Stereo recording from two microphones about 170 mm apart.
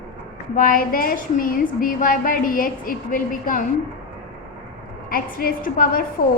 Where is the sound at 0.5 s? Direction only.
55° left (ahead or behind).